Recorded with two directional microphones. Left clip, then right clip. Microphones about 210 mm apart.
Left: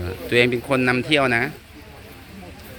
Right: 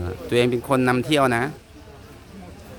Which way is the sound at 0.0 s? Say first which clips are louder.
Left 2 dB; 10° right (ahead or behind).